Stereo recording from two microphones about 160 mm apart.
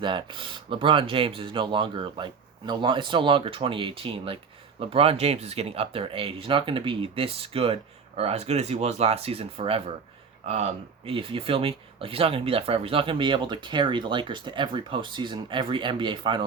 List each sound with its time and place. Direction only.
0.0 s speech: 30° right (ahead or behind)